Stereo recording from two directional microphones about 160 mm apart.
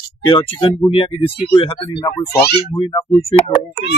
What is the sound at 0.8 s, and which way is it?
Speech, 35° left (ahead or behind).